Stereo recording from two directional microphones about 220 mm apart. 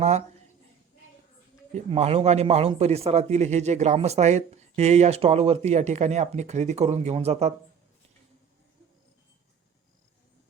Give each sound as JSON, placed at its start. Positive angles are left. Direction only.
{"t": 1.7, "sound": "speech", "side_deg": -30}